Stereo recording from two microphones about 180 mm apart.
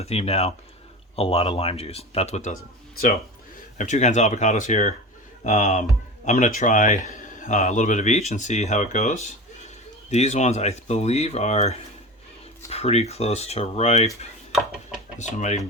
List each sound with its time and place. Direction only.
0.0 s speech: 35° left (ahead or behind)
3.8 s speech: 45° left (ahead or behind)
14.5 s a sound: centre (ahead or behind)
15.2 s speech: 40° left (ahead or behind)